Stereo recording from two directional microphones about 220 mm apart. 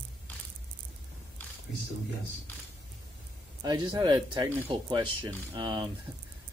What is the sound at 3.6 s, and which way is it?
Speech, 15° right (ahead or behind).